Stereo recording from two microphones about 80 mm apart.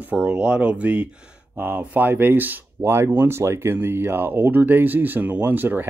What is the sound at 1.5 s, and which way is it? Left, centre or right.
Speech, right.